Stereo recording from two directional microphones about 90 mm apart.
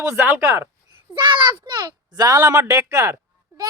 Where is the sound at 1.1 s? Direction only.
60° right (ahead or behind); by 3.1 s 35° right (ahead or behind).